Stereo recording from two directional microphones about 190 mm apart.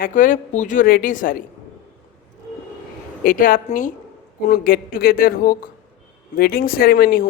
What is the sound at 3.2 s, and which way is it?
A man's voice, 45° left (ahead or behind).